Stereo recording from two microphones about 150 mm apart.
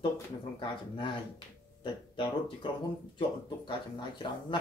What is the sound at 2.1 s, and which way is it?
A man's voice, 35° left (ahead or behind).